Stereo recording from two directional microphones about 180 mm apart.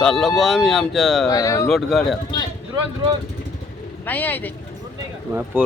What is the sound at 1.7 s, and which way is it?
Speech, centre (ahead or behind).